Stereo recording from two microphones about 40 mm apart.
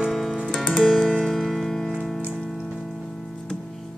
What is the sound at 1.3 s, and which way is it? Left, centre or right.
Music, centre.